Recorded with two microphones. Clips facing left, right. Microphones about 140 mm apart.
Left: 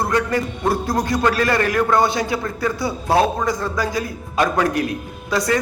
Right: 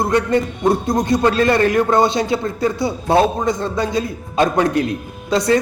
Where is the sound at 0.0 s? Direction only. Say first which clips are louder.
Right 3 dB; 25° right (ahead or behind).